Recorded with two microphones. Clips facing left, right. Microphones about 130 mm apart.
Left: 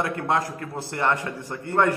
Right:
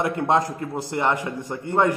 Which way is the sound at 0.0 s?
20° right (ahead or behind).